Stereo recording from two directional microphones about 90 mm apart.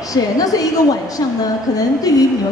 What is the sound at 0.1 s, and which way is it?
Speech, 40° left (ahead or behind).